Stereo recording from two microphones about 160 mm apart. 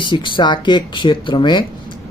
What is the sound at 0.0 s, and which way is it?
Speech, 30° left (ahead or behind).